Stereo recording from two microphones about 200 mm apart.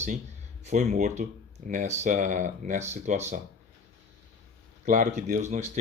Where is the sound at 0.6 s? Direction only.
35° right (ahead or behind).